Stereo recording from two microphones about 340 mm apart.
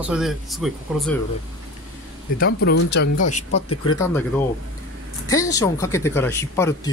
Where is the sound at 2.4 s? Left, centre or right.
Left.